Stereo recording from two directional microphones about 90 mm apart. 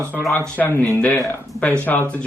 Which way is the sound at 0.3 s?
20° left (ahead or behind).